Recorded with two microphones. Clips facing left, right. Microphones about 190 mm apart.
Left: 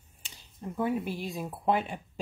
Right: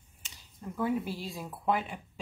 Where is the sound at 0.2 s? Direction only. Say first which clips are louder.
Left 3 dB; 30° left (ahead or behind).